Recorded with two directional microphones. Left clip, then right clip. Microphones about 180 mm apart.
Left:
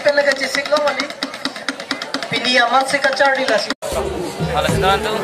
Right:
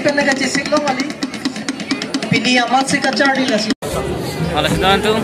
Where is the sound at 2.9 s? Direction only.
25° left (ahead or behind).